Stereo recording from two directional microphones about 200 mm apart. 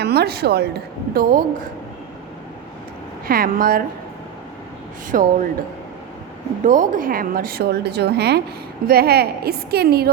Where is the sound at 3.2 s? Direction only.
45° right (ahead or behind).